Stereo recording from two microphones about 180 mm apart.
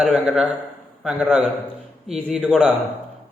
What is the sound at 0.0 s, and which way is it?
A man's voice, 5° right (ahead or behind).